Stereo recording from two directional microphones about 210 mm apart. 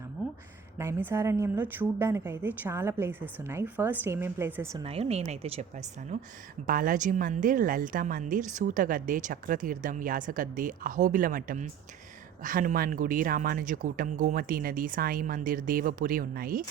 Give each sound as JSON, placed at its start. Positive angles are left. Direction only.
{"t": 0.2, "sound": "a sound", "side_deg": -5}
{"t": 0.8, "sound": "a woman's voice", "side_deg": -10}
{"t": 4.8, "sound": "a woman's voice", "side_deg": -30}